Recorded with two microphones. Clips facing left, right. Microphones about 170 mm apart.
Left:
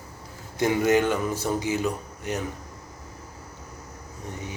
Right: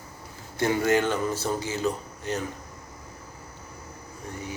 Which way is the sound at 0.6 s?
15° left (ahead or behind).